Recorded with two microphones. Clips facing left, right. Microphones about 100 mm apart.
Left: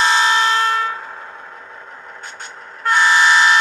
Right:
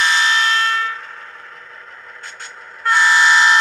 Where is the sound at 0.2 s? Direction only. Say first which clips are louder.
Left 2 dB; 20° left (ahead or behind).